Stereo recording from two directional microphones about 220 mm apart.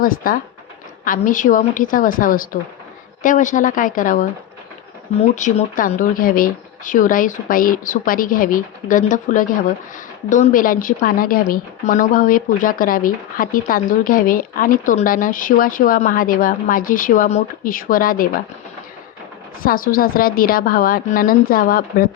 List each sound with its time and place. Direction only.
0.0 s speech: 40° left (ahead or behind)
5.3 s speech: 35° left (ahead or behind)
19.6 s speech: 40° left (ahead or behind)